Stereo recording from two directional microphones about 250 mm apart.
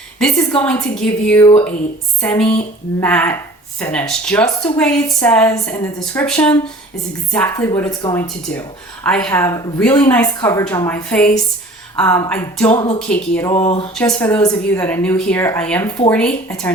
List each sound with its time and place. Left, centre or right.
0.2 s a woman's voice: centre
12.7 s speech: centre
13.0 s a woman's voice: centre
13.5 s a sound: left
13.9 s speech: centre